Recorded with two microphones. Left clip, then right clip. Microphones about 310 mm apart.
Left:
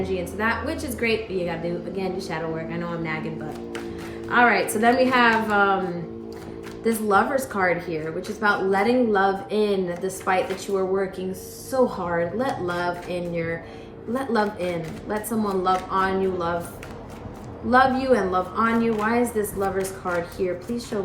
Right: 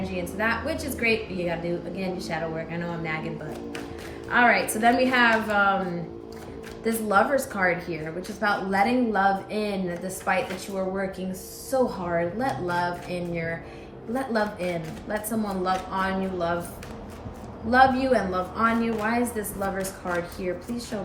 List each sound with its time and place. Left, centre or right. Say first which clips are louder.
0.0 s a woman's voice: left 3 dB; centre
4.3 s a woman's voice: left 2 dB; centre
6.8 s a woman's voice: left 2 dB; centre
17.7 s a woman's voice: left 1 dB; centre